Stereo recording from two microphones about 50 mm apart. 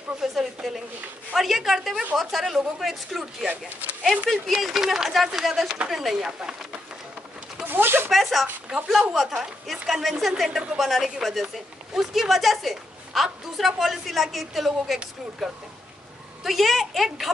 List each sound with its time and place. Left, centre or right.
0.2 s speech: centre
7.6 s a sound: right
8.1 s speech: centre